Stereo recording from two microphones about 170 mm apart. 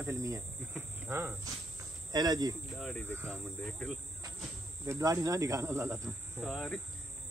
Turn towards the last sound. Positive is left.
turn(degrees=0)  # may be behind; listen again after turning